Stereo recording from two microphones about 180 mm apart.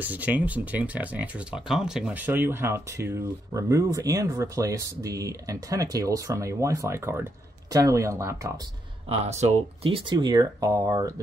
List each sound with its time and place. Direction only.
0.0 s speech: 10° right (ahead or behind)
9.1 s speech: 35° right (ahead or behind); by 11.1 s 20° right (ahead or behind)